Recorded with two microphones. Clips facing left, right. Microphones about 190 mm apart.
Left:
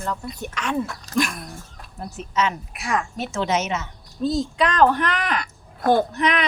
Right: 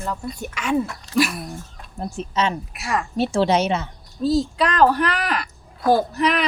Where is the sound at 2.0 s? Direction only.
30° right (ahead or behind).